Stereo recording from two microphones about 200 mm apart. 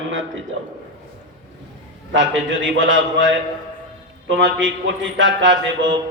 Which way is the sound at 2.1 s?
70° right (ahead or behind).